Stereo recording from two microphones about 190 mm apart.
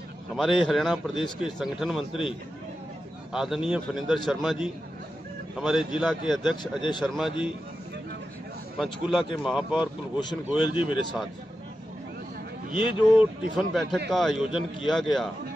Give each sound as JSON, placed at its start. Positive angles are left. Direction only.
{"t": 0.4, "sound": "a man's voice", "side_deg": 0}
{"t": 3.3, "sound": "a man's voice", "side_deg": 0}
{"t": 5.6, "sound": "a man's voice", "side_deg": 0}
{"t": 6.8, "sound": "speech", "side_deg": 25}
{"t": 8.7, "sound": "a man's voice", "side_deg": 0}
{"t": 10.6, "sound": "speech", "side_deg": 25}
{"t": 12.7, "sound": "speech", "side_deg": 25}
{"t": 13.2, "sound": "a man's voice", "side_deg": 0}